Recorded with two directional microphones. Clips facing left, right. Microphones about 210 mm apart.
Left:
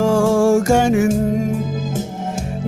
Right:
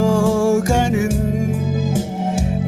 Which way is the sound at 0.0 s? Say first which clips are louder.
Left 1 dB; 50° left (ahead or behind).